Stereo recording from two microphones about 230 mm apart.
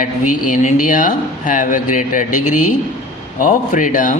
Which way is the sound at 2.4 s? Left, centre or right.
Left.